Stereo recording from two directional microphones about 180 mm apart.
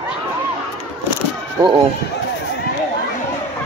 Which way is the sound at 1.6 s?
25° right (ahead or behind).